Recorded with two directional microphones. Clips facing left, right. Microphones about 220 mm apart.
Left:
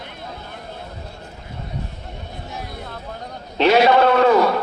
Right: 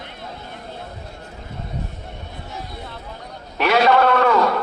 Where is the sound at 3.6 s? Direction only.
25° left (ahead or behind).